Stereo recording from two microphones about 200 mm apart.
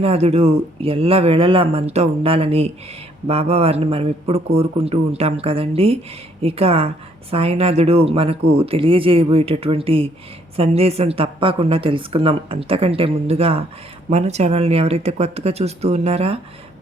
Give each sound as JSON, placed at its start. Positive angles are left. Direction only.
{"t": 0.0, "sound": "a woman's voice", "side_deg": -30}